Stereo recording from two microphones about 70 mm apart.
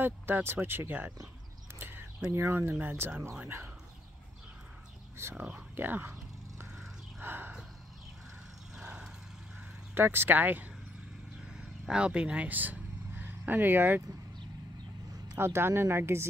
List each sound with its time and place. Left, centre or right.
0.0 s speech: right
1.8 s a sound: right
2.2 s a woman's voice: right
5.3 s speech: right
7.2 s gasp: right
8.7 s vehicle: centre
9.9 s speech: right
11.4 s vehicle: centre; by 14.0 s right
15.3 s a woman's voice: right